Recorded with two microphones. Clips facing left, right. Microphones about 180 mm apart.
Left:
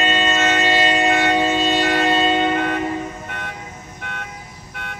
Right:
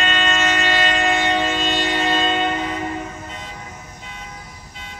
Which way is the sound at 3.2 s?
65° left (ahead or behind).